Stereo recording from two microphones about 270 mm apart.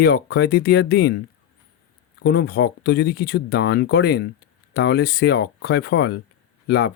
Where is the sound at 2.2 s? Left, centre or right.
Left.